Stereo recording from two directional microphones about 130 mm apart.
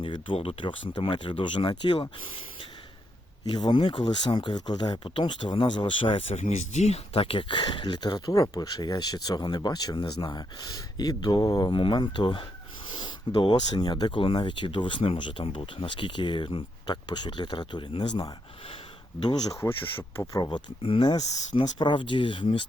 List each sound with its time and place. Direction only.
0.0 s speech: 40° left (ahead or behind)
19.5 s speech: 20° left (ahead or behind); by 22.6 s 40° left (ahead or behind)